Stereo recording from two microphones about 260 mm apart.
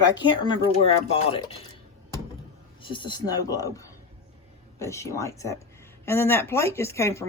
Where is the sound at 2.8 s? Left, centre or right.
Centre.